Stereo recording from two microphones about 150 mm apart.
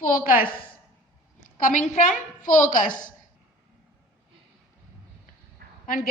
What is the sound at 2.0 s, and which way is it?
Speech, 60° left (ahead or behind).